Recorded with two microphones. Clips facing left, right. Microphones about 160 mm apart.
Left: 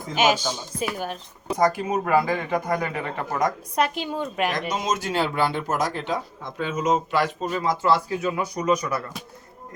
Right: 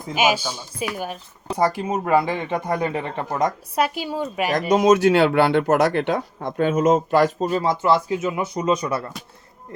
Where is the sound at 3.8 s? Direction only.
5° right (ahead or behind).